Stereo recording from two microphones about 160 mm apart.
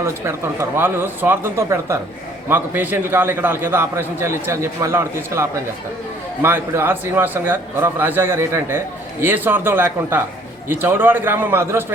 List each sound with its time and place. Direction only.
0.0 s a man's voice: 15° right (ahead or behind)